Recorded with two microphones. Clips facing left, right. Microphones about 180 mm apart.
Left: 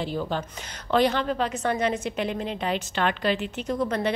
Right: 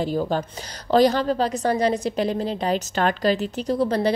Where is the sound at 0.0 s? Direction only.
40° right (ahead or behind).